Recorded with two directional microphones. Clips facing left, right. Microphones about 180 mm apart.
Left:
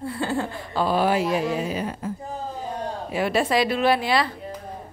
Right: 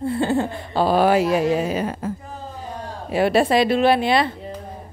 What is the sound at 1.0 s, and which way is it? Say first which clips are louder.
Speech: right 5 dB; 75° right (ahead or behind).